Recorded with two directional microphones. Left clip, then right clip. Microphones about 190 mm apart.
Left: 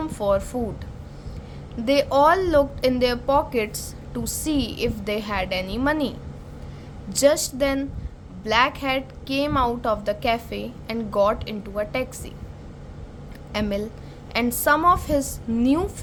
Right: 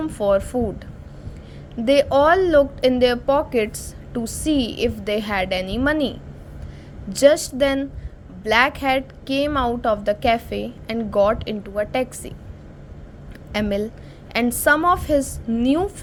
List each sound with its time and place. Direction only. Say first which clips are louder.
0.0 s a woman's voice: right 3 dB; 15° right (ahead or behind)
1.8 s a woman's voice: right 2 dB; 20° right (ahead or behind)
13.5 s a woman's voice: right 3 dB; 20° right (ahead or behind)